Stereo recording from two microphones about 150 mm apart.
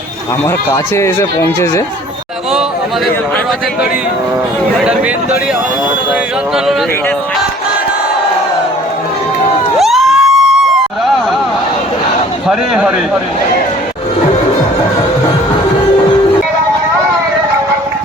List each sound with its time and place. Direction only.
0.7 s speech: 20° left (ahead or behind)
9.7 s a sound: centre (ahead or behind)
12.5 s a man's voice: 5° right (ahead or behind)